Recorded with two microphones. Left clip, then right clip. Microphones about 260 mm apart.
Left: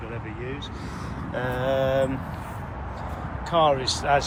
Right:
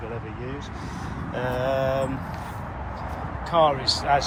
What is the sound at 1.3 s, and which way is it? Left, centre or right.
Speech, centre.